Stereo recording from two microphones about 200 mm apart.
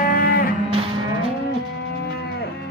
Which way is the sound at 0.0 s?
50° left (ahead or behind).